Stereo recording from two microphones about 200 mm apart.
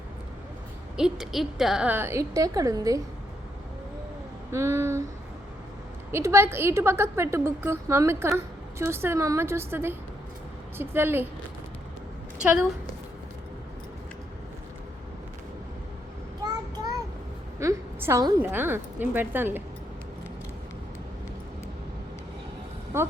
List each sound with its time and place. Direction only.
0.9 s a woman's voice: centre (ahead or behind)
4.5 s a woman's voice: 15° right (ahead or behind)
6.1 s a woman's voice: 10° right (ahead or behind)
12.4 s a woman's voice: 5° right (ahead or behind)
16.4 s child singing: 20° right (ahead or behind)
17.6 s a woman's voice: 15° right (ahead or behind)
22.9 s speech: 15° right (ahead or behind)